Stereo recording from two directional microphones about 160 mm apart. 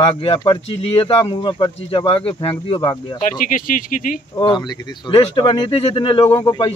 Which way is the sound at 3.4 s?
60° left (ahead or behind).